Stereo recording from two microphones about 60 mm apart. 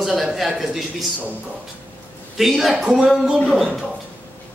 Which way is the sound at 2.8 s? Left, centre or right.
Centre.